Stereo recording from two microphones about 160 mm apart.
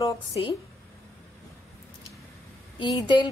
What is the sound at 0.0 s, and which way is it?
Speech, 30° left (ahead or behind).